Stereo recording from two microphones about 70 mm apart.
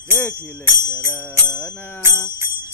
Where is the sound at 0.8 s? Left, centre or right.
Right.